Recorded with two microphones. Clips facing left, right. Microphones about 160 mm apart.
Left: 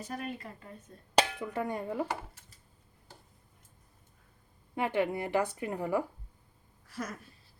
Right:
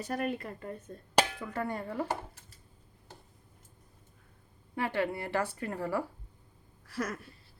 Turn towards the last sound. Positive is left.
turn(degrees=-75)  # may be behind; listen again after turning